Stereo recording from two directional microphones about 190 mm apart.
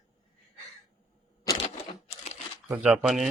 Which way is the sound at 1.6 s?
35° left (ahead or behind).